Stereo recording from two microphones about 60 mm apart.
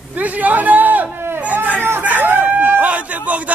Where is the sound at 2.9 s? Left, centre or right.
Right.